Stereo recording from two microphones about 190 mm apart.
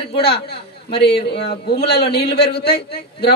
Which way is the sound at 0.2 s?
55° left (ahead or behind).